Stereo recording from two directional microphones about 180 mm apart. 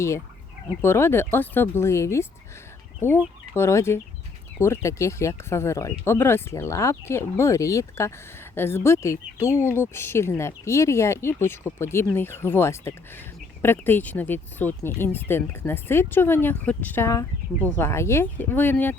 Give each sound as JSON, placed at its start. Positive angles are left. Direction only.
{"t": 0.8, "sound": "speech", "side_deg": 15}
{"t": 3.5, "sound": "speech", "side_deg": 15}